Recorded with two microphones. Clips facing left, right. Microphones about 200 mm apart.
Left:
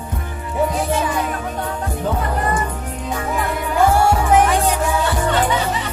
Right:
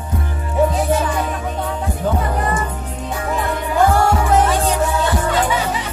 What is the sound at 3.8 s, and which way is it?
Music, 10° left (ahead or behind).